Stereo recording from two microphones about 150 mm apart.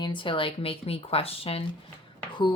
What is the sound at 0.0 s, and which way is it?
A woman's voice, 30° left (ahead or behind).